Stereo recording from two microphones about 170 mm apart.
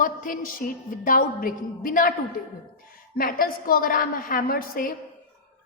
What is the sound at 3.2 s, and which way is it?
A woman's voice, 60° left (ahead or behind).